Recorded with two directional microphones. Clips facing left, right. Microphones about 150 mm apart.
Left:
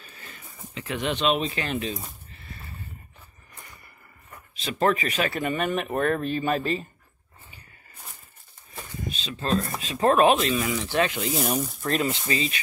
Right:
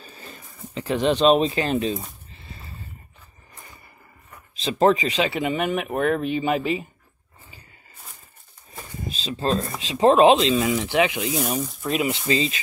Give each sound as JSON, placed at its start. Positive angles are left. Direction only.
{"t": 0.0, "sound": "speech", "side_deg": -30}
{"t": 2.4, "sound": "a sound", "side_deg": -25}
{"t": 4.6, "sound": "speech", "side_deg": -30}
{"t": 5.3, "sound": "speech", "side_deg": -15}
{"t": 9.0, "sound": "a sound", "side_deg": -30}
{"t": 9.9, "sound": "speech", "side_deg": -25}
{"t": 11.3, "sound": "speech", "side_deg": 0}
{"t": 12.1, "sound": "speech", "side_deg": -20}